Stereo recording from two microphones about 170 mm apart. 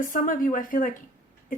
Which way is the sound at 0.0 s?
50° left (ahead or behind).